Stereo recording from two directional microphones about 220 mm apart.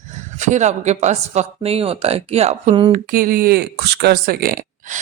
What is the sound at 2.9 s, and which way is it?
Speech, 40° right (ahead or behind).